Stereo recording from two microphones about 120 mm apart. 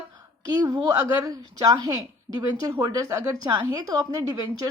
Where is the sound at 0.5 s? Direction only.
35° right (ahead or behind).